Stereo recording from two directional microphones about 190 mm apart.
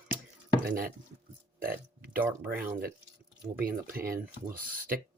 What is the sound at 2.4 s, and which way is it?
Speech, 50° right (ahead or behind).